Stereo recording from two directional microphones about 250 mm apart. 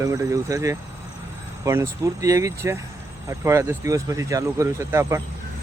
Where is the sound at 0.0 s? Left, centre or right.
Centre.